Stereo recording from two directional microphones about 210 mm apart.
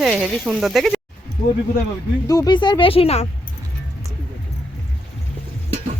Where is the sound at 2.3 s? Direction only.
20° left (ahead or behind).